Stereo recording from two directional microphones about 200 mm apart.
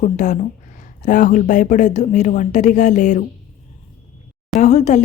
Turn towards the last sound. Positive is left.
turn(degrees=35)  # may be behind; listen again after turning